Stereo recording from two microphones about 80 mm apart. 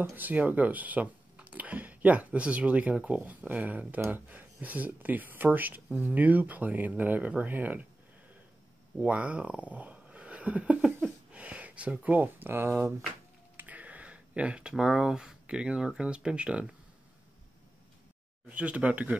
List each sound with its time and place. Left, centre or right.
0.1 s speech: right
9.0 s speech: centre
13.6 s speech: centre
18.5 s speech: centre